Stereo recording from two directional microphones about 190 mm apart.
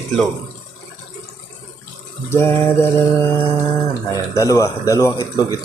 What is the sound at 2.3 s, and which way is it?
Speech, 15° left (ahead or behind).